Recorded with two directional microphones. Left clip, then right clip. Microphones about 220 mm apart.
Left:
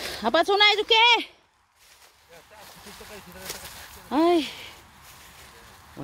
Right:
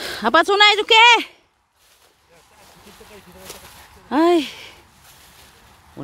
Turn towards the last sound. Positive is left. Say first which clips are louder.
# right 5 dB
turn(degrees=-25)  # may be behind; listen again after turning